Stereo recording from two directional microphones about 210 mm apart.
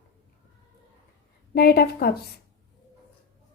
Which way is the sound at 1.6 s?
50° left (ahead or behind).